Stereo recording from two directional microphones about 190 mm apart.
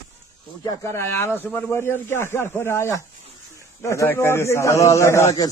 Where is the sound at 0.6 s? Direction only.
15° left (ahead or behind).